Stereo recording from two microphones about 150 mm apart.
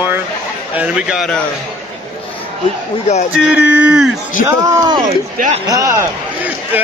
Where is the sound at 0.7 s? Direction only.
10° right (ahead or behind).